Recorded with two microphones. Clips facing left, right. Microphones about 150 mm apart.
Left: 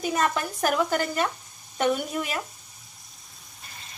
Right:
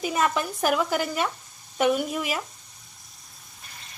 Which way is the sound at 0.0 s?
5° right (ahead or behind).